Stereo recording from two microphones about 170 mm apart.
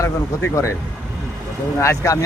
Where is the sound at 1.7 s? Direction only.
15° left (ahead or behind).